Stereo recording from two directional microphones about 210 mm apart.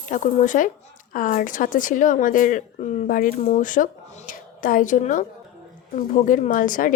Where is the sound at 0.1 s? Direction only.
35° left (ahead or behind).